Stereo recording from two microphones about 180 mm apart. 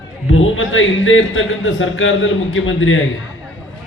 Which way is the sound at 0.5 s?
90° left.